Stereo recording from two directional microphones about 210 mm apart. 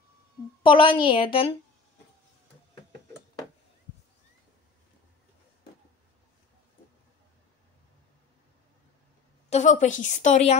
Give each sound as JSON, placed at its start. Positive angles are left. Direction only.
{"t": 0.6, "sound": "a woman's voice", "side_deg": 25}
{"t": 9.5, "sound": "a woman's voice", "side_deg": 35}